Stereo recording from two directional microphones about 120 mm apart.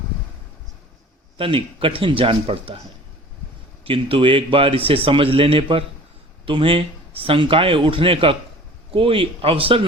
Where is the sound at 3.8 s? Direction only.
50° right (ahead or behind).